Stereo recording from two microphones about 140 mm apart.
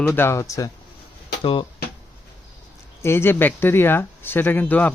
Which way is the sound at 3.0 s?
15° left (ahead or behind).